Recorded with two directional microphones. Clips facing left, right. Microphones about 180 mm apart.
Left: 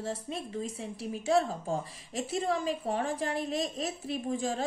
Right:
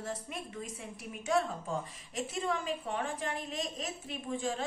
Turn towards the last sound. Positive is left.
turn(degrees=35)  # may be behind; listen again after turning